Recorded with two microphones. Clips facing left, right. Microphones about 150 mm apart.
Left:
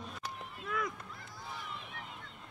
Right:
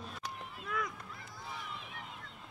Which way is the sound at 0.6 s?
Centre (ahead or behind).